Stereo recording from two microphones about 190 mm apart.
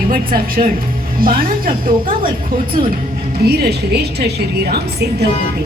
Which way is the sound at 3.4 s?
55° right (ahead or behind).